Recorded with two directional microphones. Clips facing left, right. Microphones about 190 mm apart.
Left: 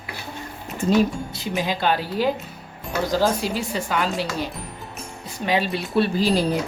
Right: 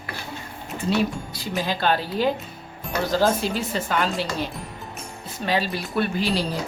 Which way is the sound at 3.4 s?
10° left (ahead or behind).